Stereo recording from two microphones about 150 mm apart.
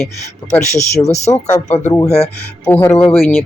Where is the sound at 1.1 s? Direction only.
45° left (ahead or behind).